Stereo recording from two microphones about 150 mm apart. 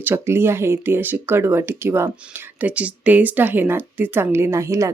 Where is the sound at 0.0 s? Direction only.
15° right (ahead or behind).